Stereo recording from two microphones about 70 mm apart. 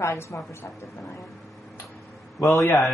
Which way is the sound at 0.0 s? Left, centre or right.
Left.